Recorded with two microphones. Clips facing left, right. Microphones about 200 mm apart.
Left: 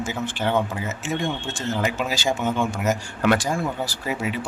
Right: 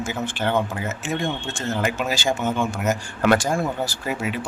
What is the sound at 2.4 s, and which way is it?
Speech, centre (ahead or behind).